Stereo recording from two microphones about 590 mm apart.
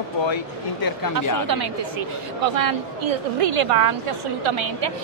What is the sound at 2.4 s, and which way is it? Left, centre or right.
A woman's voice, right.